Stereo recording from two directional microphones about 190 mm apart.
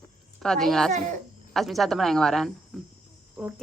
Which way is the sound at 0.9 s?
40° right (ahead or behind).